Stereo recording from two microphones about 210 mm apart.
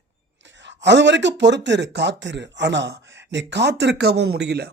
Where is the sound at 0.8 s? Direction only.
55° right (ahead or behind).